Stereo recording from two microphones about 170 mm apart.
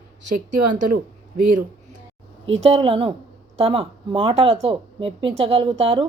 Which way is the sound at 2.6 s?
35° right (ahead or behind).